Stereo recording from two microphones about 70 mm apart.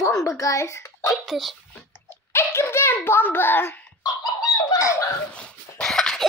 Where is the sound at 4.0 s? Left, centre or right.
Left.